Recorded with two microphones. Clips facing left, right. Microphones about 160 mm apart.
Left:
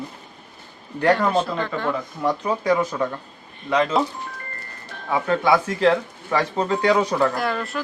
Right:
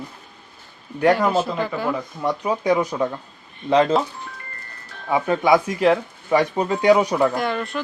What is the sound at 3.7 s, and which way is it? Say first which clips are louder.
Speech: right 4 dB; 30° right (ahead or behind).